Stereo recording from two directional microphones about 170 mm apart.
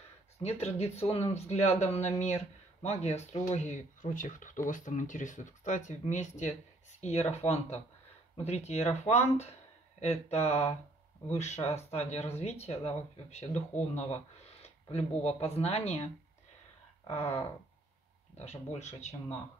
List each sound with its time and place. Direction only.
0.4 s speech: 40° left (ahead or behind)
17.1 s speech: 40° left (ahead or behind)
18.4 s speech: 40° left (ahead or behind)